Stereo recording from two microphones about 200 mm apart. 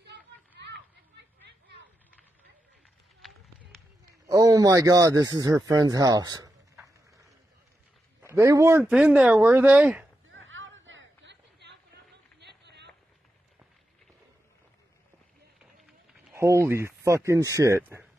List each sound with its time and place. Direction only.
3.2 s run: centre (ahead or behind)
4.3 s speech: 15° right (ahead or behind)
8.4 s speech: 15° right (ahead or behind)
10.3 s chatter: 70° right (ahead or behind); by 12.9 s 55° right (ahead or behind)
16.3 s speech: 15° right (ahead or behind)